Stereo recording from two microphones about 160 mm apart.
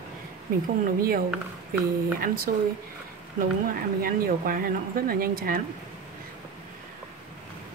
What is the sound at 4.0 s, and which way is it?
Speech, 65° right (ahead or behind).